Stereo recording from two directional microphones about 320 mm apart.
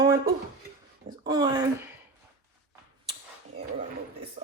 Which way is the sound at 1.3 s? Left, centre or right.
Centre.